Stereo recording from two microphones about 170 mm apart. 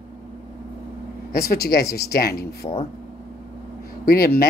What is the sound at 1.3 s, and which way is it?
Speech, 65° left (ahead or behind).